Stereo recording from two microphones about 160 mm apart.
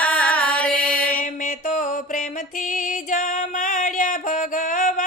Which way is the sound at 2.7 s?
55° left (ahead or behind).